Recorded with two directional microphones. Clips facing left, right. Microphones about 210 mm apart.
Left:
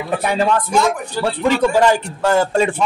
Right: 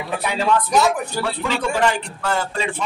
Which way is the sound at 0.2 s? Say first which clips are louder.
Left 1 dB; 45° left (ahead or behind).